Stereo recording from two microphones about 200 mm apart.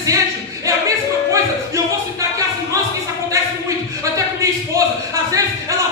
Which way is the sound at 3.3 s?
15° right (ahead or behind).